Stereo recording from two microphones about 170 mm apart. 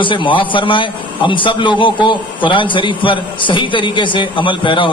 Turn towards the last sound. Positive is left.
turn(degrees=30)  # may be behind; listen again after turning